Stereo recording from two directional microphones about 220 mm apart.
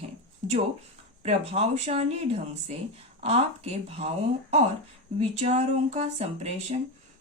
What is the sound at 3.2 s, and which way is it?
Speech, 30° right (ahead or behind).